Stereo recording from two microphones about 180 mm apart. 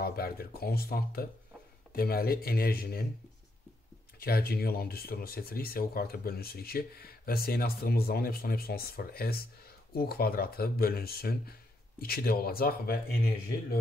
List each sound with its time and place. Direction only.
0.0 s speech: 60° left (ahead or behind)
4.2 s speech: 60° left (ahead or behind)